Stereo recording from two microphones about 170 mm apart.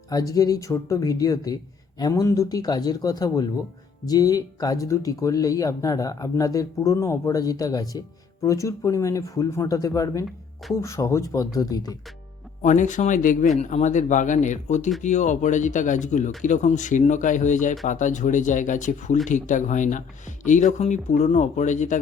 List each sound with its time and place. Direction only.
0.1 s speech: 20° left (ahead or behind)
12.6 s speech: 45° left (ahead or behind)